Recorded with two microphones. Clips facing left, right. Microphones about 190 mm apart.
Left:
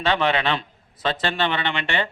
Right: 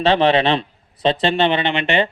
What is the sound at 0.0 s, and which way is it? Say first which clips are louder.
A man's voice: right 7 dB; 30° right (ahead or behind).